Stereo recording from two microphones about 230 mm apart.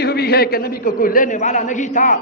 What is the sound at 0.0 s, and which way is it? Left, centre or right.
A man's voice, left.